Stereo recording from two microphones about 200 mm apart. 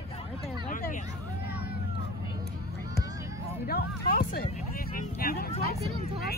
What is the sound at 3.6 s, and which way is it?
Music, 50° left (ahead or behind).